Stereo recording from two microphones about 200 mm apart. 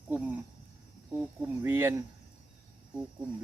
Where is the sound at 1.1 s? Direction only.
10° right (ahead or behind).